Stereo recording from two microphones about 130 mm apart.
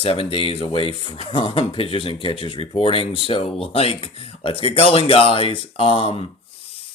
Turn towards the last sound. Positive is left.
turn(degrees=45)  # may be behind; listen again after turning